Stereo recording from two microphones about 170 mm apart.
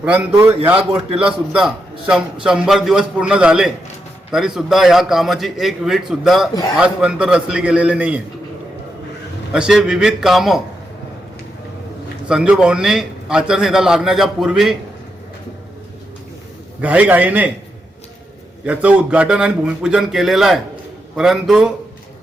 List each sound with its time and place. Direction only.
0.0 s a man's voice: 10° right (ahead or behind)
0.8 s a man's voice: 35° right (ahead or behind)
1.5 s a man's voice: 5° right (ahead or behind)
9.5 s a man's voice: 5° right (ahead or behind)
12.3 s a man's voice: 5° right (ahead or behind)
16.8 s a man's voice: 10° right (ahead or behind)
18.6 s a man's voice: 10° right (ahead or behind)